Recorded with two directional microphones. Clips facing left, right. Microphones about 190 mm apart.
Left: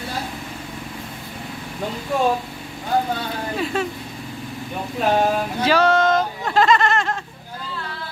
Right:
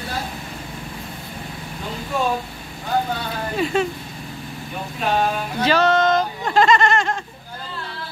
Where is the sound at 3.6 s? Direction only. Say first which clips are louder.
Right 4 dB; centre (ahead or behind).